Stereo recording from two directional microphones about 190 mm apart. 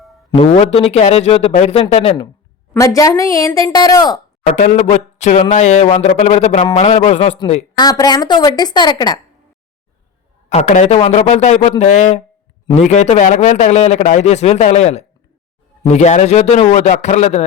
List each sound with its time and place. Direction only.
0.3 s a man's voice: 30° left (ahead or behind)
2.7 s a woman's voice: 15° left (ahead or behind)
4.5 s a man's voice: 40° left (ahead or behind)
7.8 s a woman's voice: 20° left (ahead or behind)
10.5 s a man's voice: 40° left (ahead or behind)